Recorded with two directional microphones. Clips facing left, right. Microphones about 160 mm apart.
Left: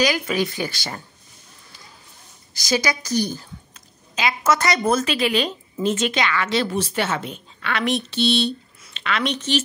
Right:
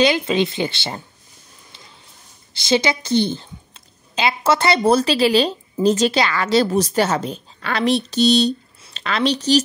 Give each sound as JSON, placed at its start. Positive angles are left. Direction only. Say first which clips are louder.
{"t": 0.0, "sound": "speech", "louder": "right 4 dB", "side_deg": -25}
{"t": 2.5, "sound": "a woman's voice", "louder": "right 4 dB", "side_deg": -25}